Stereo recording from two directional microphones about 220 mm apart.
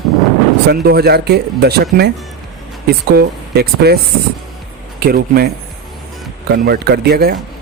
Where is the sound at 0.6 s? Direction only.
45° right (ahead or behind).